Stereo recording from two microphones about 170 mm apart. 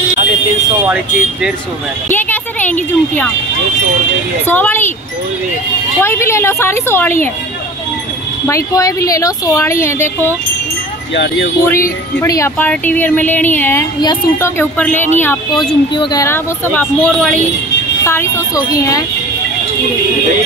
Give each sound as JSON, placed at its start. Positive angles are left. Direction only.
{"t": 2.0, "sound": "speech", "side_deg": 10}
{"t": 4.5, "sound": "speech", "side_deg": 10}
{"t": 5.9, "sound": "a woman's voice", "side_deg": 15}
{"t": 8.5, "sound": "a woman's voice", "side_deg": 20}
{"t": 12.2, "sound": "a woman's voice", "side_deg": 15}
{"t": 14.0, "sound": "speech", "side_deg": 25}
{"t": 14.6, "sound": "a woman's voice", "side_deg": 10}
{"t": 15.5, "sound": "speech", "side_deg": 25}
{"t": 16.7, "sound": "a woman's voice", "side_deg": 10}